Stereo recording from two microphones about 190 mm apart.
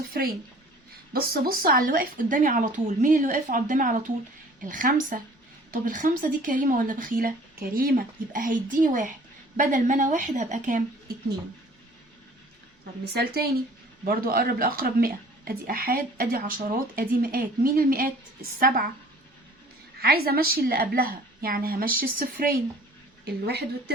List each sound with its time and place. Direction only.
1.1 s a woman's voice: 50° right (ahead or behind)
13.1 s speech: 55° right (ahead or behind)
20.0 s speech: 55° right (ahead or behind)